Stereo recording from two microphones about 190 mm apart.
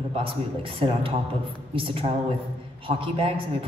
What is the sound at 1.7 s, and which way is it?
A woman's voice, 30° right (ahead or behind).